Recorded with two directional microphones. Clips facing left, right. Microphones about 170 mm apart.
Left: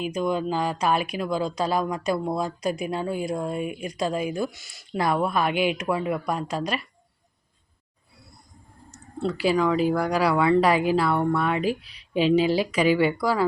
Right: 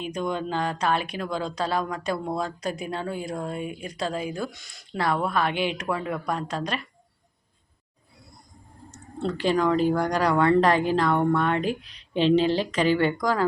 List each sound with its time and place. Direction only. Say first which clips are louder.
0.0 s speech: left 3 dB; 5° left (ahead or behind)
8.9 s speech: left 1 dB; 5° left (ahead or behind)